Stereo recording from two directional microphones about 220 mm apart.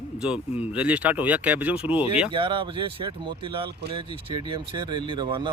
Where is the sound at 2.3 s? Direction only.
20° right (ahead or behind).